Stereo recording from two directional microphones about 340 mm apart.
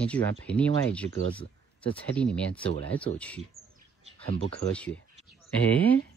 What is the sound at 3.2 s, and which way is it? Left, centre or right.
Speech, centre.